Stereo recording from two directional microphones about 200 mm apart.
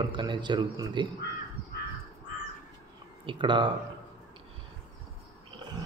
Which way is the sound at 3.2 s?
25° right (ahead or behind).